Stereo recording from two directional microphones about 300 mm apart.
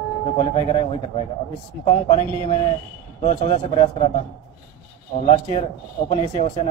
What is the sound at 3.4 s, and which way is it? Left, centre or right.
Speech, centre.